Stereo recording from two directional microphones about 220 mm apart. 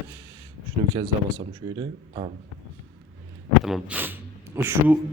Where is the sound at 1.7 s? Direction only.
20° right (ahead or behind).